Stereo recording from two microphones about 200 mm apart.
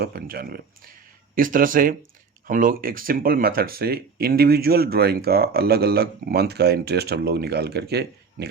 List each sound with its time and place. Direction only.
0.0 s speech: 45° right (ahead or behind)